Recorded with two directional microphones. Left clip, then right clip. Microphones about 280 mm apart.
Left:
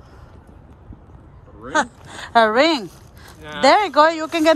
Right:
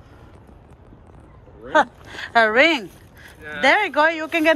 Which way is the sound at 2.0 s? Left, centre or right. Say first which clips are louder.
Right 1 dB; left.